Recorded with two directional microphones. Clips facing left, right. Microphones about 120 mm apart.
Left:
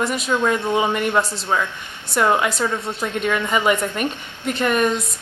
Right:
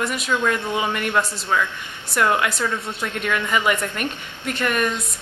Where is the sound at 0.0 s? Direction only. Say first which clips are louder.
Left 2 dB; 25° left (ahead or behind).